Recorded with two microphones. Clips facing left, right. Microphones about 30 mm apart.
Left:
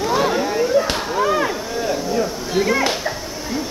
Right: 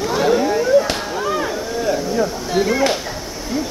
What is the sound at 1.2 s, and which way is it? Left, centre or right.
Chop, left.